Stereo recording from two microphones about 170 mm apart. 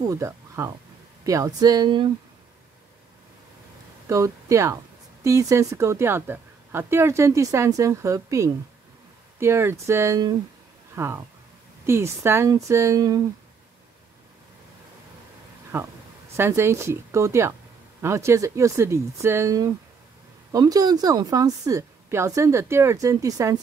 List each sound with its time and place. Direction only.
0.0 s a woman's voice: 20° right (ahead or behind)
4.1 s a woman's voice: 20° right (ahead or behind)
15.7 s a woman's voice: 15° right (ahead or behind)